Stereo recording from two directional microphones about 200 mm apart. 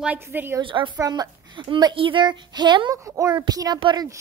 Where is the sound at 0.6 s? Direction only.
25° right (ahead or behind).